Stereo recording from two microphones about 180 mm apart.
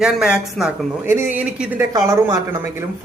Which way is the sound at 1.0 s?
15° right (ahead or behind).